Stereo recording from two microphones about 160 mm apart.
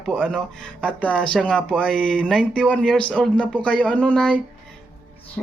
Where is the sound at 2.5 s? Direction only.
5° left (ahead or behind).